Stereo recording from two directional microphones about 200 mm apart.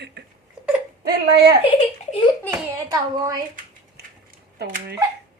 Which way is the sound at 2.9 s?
20° right (ahead or behind).